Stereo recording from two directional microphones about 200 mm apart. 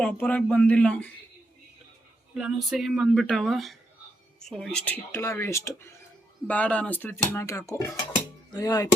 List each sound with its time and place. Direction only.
0.0 s speech: 5° left (ahead or behind)
2.3 s speech: centre (ahead or behind); by 8.9 s 20° left (ahead or behind)